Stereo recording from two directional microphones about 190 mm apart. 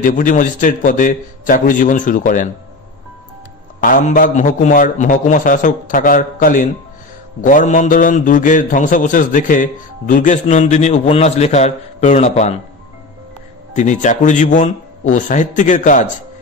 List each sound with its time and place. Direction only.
0.0 s a man's voice: 45° left (ahead or behind)
3.8 s a man's voice: 45° left (ahead or behind)
13.7 s a man's voice: 40° left (ahead or behind)